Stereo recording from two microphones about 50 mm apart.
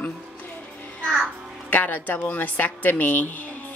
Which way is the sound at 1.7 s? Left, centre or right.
Left.